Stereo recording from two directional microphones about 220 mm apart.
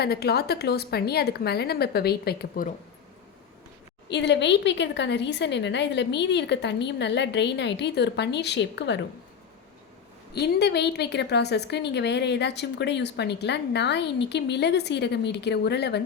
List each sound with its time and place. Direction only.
0.0 s a woman's voice: 45° left (ahead or behind)
4.1 s a woman's voice: 50° left (ahead or behind)
10.3 s a woman's voice: 50° left (ahead or behind)